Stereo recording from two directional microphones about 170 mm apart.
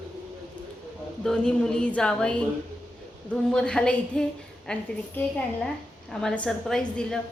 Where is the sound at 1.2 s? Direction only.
5° left (ahead or behind).